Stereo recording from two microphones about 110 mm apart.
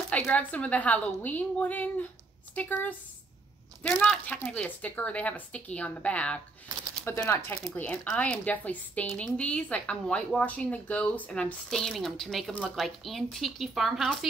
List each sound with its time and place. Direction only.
0.1 s speech: 15° left (ahead or behind); by 14.1 s centre (ahead or behind)